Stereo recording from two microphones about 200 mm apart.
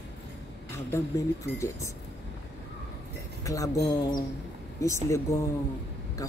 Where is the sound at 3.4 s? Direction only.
15° left (ahead or behind).